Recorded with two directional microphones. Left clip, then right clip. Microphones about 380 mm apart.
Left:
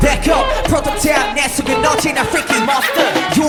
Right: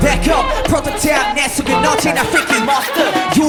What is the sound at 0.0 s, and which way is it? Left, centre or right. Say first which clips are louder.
Music: even; centre.